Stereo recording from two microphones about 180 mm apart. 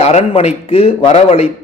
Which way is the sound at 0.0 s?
35° left (ahead or behind).